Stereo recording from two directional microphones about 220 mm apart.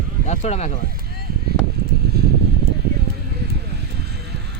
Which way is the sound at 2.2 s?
45° right (ahead or behind).